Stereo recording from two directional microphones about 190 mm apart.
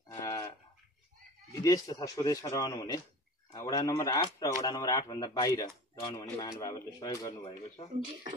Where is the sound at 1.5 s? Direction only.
15° left (ahead or behind).